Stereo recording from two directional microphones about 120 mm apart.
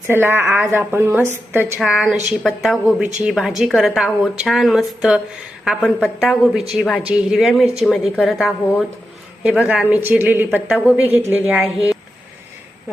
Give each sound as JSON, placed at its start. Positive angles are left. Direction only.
{"t": 0.1, "sound": "a woman's voice", "side_deg": -20}
{"t": 1.8, "sound": "a woman's voice", "side_deg": 0}
{"t": 7.0, "sound": "a woman's voice", "side_deg": -10}